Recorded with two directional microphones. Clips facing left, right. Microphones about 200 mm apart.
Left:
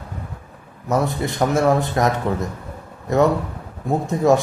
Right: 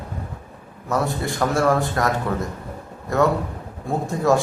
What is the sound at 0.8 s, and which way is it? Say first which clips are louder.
A man's voice: left 2 dB; 20° left (ahead or behind).